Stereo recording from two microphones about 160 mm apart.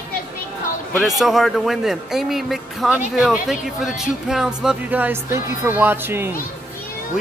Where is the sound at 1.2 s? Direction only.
Centre (ahead or behind).